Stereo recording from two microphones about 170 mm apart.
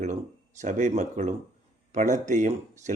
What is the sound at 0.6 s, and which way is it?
Speech, 45° right (ahead or behind).